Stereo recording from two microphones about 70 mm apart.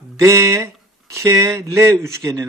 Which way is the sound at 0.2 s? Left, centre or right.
Right.